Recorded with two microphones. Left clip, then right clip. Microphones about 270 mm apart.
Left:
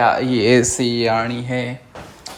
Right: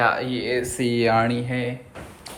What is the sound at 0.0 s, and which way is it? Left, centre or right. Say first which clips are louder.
Speech: left 6 dB; centre.